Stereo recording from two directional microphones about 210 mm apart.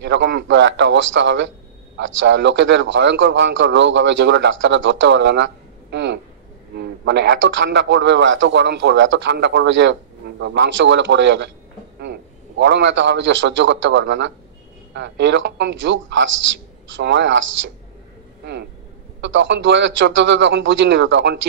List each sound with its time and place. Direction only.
0.0 s a man's voice: 60° right (ahead or behind)